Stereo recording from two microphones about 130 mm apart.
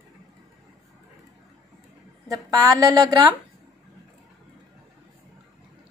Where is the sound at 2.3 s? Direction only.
25° right (ahead or behind).